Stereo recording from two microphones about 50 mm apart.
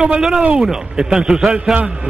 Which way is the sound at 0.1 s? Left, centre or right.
Centre.